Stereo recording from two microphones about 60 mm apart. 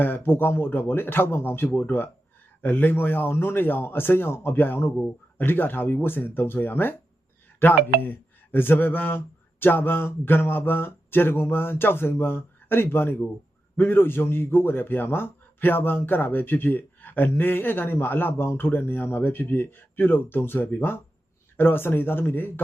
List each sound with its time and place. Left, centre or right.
0.0 s a man's voice: left